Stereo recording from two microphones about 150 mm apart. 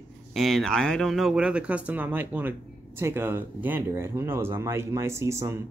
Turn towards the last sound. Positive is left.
turn(degrees=-20)  # may be behind; listen again after turning